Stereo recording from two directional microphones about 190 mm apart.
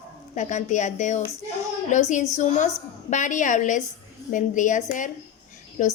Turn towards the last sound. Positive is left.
turn(degrees=40)  # may be behind; listen again after turning